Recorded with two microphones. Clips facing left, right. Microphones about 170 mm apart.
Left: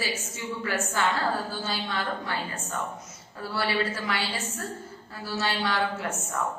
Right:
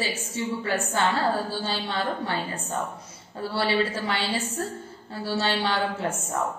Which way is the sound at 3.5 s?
30° right (ahead or behind).